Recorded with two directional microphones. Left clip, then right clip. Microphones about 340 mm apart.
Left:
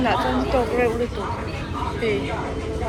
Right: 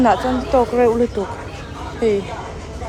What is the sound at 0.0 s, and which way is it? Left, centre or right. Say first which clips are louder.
Speech: right 5 dB; centre.